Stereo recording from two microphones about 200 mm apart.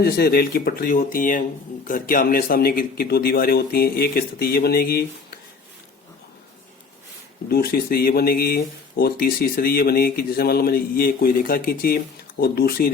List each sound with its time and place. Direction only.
0.0 s speech: 50° left (ahead or behind)
7.4 s speech: 50° left (ahead or behind)